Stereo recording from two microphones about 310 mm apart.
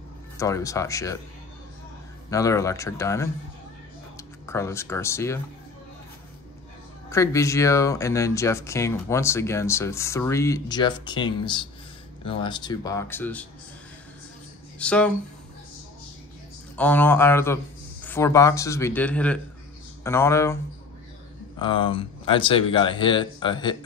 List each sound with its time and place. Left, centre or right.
0.4 s speech: centre
2.2 s speech: centre
7.1 s speech: centre
14.8 s speech: centre
16.7 s speech: centre
21.5 s speech: centre